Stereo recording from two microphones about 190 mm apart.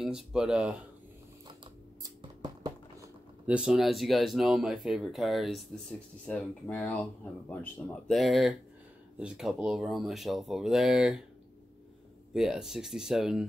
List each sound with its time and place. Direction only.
0.0 s speech: 5° right (ahead or behind)
2.0 s a sound: 20° right (ahead or behind)
3.4 s speech: 5° right (ahead or behind)
12.4 s speech: 5° right (ahead or behind)